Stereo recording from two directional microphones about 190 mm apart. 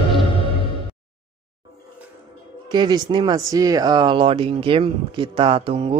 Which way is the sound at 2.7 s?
20° right (ahead or behind).